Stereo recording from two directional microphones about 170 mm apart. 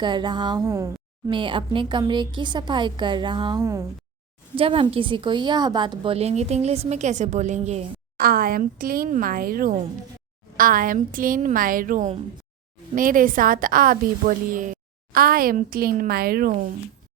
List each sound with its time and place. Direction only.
0.0 s a woman's voice: 25° right (ahead or behind)
1.3 s a woman's voice: 30° right (ahead or behind)
4.5 s a woman's voice: 30° right (ahead or behind)
8.2 s a woman's voice: 60° right (ahead or behind)